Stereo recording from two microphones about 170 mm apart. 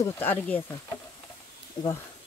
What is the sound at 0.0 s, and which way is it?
Speech, 10° left (ahead or behind).